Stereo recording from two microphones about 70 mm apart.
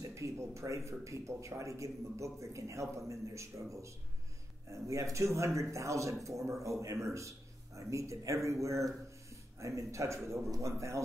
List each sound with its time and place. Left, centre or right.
0.0 s a man's voice: right